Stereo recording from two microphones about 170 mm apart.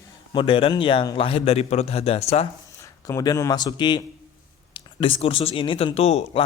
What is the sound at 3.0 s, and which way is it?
Speech, 20° left (ahead or behind).